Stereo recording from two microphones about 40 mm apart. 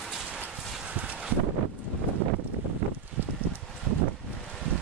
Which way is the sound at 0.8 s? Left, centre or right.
Right.